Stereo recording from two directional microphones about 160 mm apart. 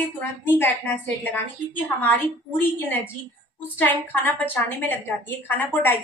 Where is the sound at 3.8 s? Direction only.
10° left (ahead or behind).